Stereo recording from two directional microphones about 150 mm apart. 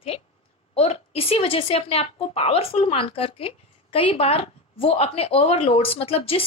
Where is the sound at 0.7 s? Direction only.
40° left (ahead or behind).